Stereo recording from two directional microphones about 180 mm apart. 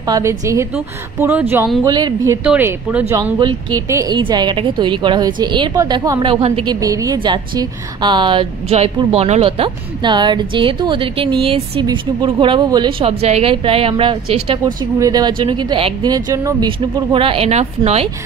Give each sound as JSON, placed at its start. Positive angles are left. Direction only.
{"t": 0.0, "sound": "speech", "side_deg": -20}
{"t": 1.9, "sound": "a woman's voice", "side_deg": -20}
{"t": 2.4, "sound": "speech", "side_deg": -5}
{"t": 3.3, "sound": "a woman's voice", "side_deg": -25}